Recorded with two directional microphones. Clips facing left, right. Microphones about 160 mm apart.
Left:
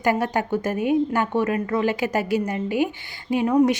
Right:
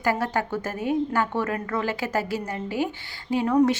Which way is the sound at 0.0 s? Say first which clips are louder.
Left 3 dB; 20° left (ahead or behind).